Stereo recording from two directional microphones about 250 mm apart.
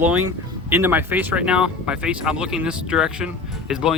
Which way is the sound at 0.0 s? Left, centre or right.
Centre.